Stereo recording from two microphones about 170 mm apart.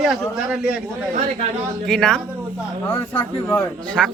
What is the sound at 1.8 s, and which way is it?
A man's voice, 5° left (ahead or behind).